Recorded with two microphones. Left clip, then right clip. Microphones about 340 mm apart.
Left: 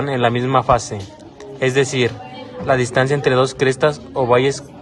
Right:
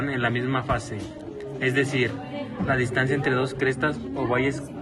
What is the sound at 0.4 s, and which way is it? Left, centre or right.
A man's voice, centre.